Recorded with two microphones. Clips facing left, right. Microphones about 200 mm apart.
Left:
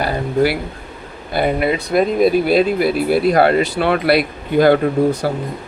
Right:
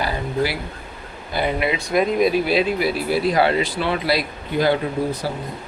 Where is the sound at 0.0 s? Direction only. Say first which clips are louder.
Left 6 dB; 55° left (ahead or behind).